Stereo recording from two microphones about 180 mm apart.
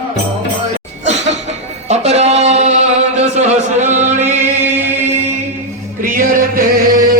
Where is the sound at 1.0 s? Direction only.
40° right (ahead or behind).